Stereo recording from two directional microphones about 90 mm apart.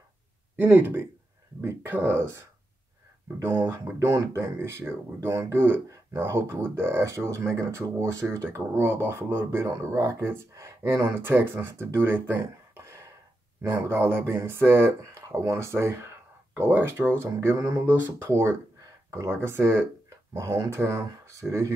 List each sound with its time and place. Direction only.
0.6 s speech: 25° right (ahead or behind)
16.5 s speech: 20° right (ahead or behind); by 21.7 s 35° right (ahead or behind)